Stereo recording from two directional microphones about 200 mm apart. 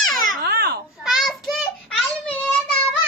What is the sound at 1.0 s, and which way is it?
Child singing, centre (ahead or behind).